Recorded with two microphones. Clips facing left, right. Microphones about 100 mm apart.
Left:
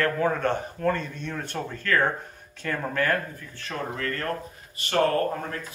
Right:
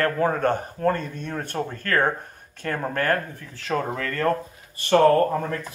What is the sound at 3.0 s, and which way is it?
Speech, 50° right (ahead or behind).